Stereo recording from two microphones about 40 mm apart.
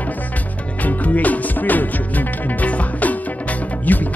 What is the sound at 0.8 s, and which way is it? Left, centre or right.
Music, left.